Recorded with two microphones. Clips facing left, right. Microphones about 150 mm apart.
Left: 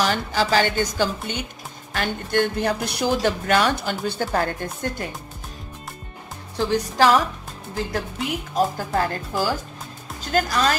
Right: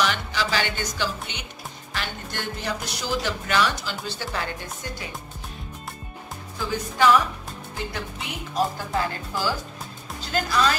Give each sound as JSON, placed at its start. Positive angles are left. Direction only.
{"t": 0.0, "sound": "speech", "side_deg": 45}
{"t": 6.7, "sound": "speech", "side_deg": 40}
{"t": 8.5, "sound": "speech", "side_deg": 45}